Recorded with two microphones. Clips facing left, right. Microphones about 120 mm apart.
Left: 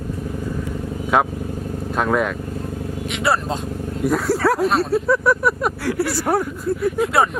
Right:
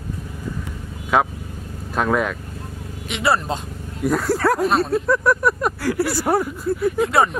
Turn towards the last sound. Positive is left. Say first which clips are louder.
# even
turn(degrees=0)  # may be behind; listen again after turning